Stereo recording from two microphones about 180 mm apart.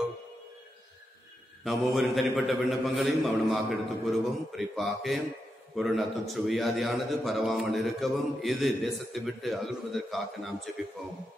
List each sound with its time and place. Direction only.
1.6 s a man's voice: centre (ahead or behind)